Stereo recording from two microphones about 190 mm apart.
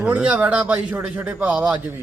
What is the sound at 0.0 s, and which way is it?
Speech, 5° right (ahead or behind).